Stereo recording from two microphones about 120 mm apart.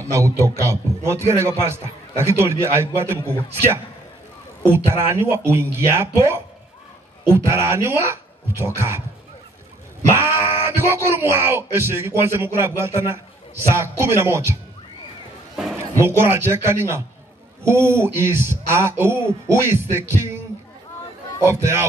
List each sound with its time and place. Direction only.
0.0 s speech: 25° right (ahead or behind)
10.1 s speech: 20° right (ahead or behind)
16.0 s speech: 20° right (ahead or behind)
21.5 s speech: 20° right (ahead or behind)